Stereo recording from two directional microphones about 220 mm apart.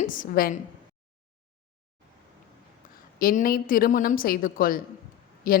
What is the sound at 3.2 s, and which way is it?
A woman's voice, 40° left (ahead or behind).